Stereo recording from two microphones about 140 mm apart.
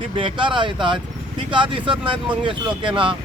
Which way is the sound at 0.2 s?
35° right (ahead or behind).